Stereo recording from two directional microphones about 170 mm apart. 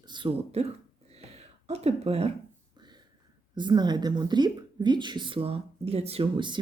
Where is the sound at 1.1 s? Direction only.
40° right (ahead or behind).